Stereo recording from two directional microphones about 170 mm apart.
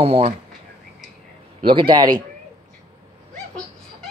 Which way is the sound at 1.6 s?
30° right (ahead or behind).